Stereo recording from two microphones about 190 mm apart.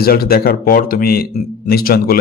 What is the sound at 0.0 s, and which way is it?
A man's voice, 55° left (ahead or behind).